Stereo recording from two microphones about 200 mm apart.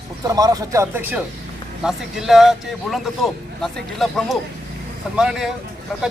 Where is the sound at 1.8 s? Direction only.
Centre (ahead or behind).